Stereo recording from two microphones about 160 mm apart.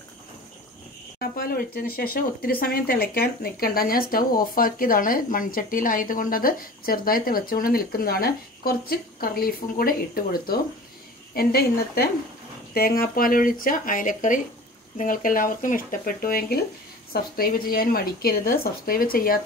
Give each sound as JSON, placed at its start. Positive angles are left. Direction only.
{"t": 1.3, "sound": "speech", "side_deg": 65}